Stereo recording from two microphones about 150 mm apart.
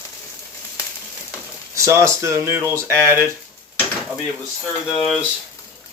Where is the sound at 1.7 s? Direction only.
20° right (ahead or behind).